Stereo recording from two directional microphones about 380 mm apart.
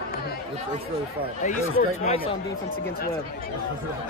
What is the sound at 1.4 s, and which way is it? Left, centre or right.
Speech, centre.